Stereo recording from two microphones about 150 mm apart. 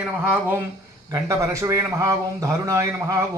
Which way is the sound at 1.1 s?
20° right (ahead or behind).